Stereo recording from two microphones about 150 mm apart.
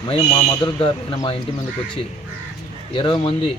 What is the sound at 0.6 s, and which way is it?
Speech, 30° left (ahead or behind).